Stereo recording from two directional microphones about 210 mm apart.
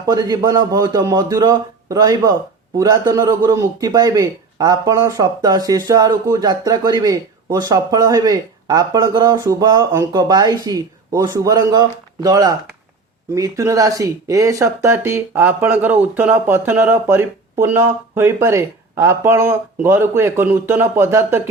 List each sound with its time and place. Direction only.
0.0 s speech: 15° right (ahead or behind)